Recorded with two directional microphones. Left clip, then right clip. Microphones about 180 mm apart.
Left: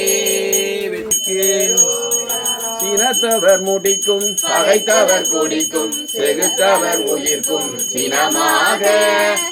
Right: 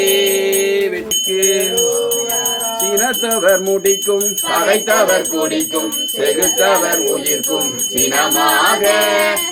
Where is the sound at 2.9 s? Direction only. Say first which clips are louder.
Left 3 dB; 15° left (ahead or behind).